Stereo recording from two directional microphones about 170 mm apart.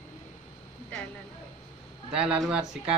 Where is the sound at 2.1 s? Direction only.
5° right (ahead or behind).